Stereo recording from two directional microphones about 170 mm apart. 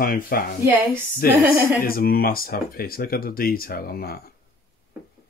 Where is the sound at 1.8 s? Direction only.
60° left (ahead or behind).